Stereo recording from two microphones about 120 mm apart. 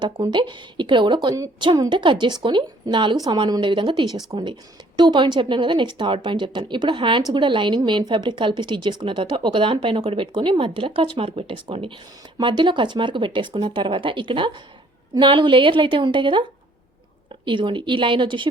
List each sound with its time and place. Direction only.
0.0 s speech: 40° right (ahead or behind)